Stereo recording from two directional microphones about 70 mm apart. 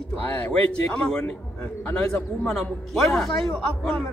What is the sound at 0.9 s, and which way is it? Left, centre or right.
Speech, centre.